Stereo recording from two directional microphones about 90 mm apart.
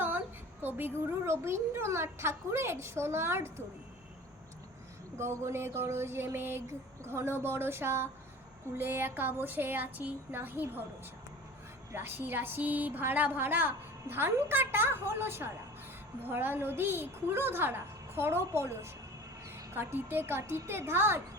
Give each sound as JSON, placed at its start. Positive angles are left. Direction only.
{"t": 0.8, "sound": "a woman's voice", "side_deg": -25}
{"t": 5.1, "sound": "a woman's voice", "side_deg": -30}
{"t": 11.9, "sound": "a woman's voice", "side_deg": -25}